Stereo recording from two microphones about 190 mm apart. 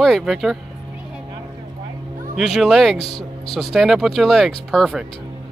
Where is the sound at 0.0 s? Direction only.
Centre (ahead or behind).